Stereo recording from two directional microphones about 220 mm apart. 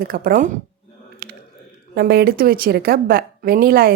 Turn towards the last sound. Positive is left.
turn(degrees=-40)  # may be behind; listen again after turning